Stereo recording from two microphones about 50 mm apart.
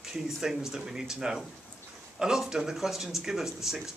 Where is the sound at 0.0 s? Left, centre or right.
Centre.